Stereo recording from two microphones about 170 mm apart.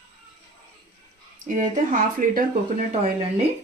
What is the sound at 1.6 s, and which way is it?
Speech, 50° right (ahead or behind).